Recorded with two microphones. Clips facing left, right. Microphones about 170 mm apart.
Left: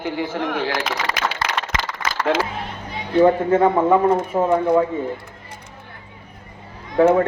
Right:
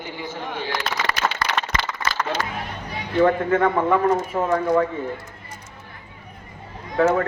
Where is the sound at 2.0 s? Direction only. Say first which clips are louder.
Left 1 dB; 90° left.